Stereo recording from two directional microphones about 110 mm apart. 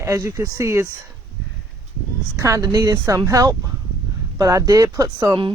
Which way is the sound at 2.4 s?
30° right (ahead or behind).